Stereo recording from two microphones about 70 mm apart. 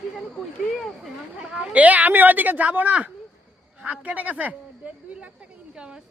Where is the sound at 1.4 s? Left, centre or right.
Centre.